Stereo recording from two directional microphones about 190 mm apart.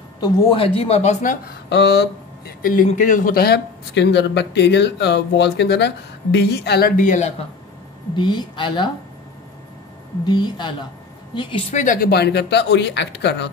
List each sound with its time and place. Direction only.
0.2 s a woman's voice: 25° left (ahead or behind)
1.7 s speech: 65° left (ahead or behind); by 7.3 s 40° left (ahead or behind)
8.2 s a woman's voice: 25° left (ahead or behind)
10.2 s a woman's voice: 25° left (ahead or behind)
11.7 s speech: 45° left (ahead or behind); by 13.5 s 65° left (ahead or behind)